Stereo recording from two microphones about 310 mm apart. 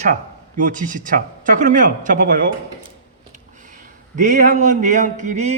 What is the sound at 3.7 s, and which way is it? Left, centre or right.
A man's voice, right.